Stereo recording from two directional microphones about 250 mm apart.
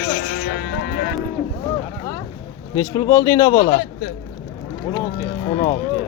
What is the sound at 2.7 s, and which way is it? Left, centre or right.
A man's voice, centre.